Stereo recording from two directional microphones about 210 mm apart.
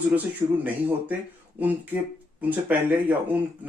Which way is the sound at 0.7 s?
10° right (ahead or behind).